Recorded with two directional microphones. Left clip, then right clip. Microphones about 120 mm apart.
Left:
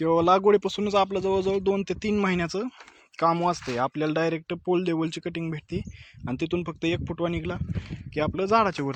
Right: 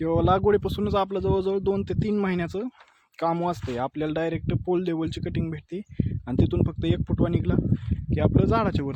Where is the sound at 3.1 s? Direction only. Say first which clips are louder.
Left 3 dB; 30° right (ahead or behind).